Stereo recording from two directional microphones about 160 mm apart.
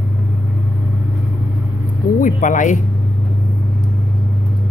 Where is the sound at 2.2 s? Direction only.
50° left (ahead or behind).